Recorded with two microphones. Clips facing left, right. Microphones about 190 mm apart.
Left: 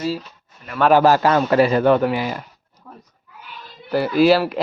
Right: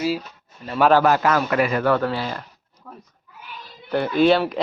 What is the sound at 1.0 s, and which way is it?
A man's voice, 30° left (ahead or behind).